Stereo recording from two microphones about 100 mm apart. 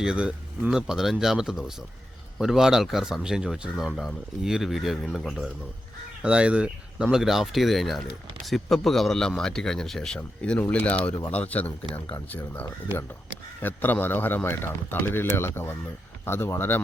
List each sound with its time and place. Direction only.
0.0 s a man's voice: 10° right (ahead or behind); by 16.8 s 20° left (ahead or behind)